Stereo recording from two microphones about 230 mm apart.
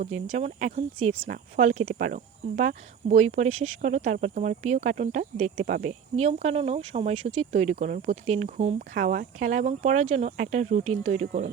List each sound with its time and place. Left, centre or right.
0.0 s speech: right